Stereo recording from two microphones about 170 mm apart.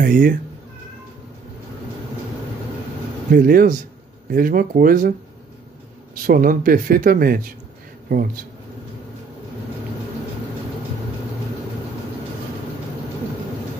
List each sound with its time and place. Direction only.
0.0 s speech: 50° right (ahead or behind)
3.3 s speech: 55° right (ahead or behind)
6.1 s speech: 55° right (ahead or behind)